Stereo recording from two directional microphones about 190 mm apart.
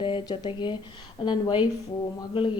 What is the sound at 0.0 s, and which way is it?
A woman's voice, 25° left (ahead or behind).